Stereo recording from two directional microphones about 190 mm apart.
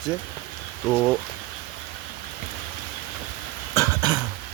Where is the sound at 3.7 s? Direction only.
20° right (ahead or behind).